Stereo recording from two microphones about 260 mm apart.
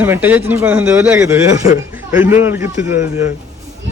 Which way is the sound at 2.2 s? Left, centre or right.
Centre.